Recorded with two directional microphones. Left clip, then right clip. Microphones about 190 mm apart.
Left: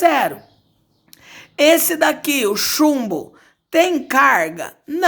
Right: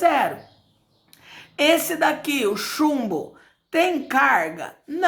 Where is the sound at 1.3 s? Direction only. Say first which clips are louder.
Left 5 dB; 45° left (ahead or behind).